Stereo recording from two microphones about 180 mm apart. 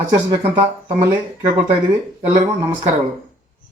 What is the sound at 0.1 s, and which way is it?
Speech, 30° right (ahead or behind).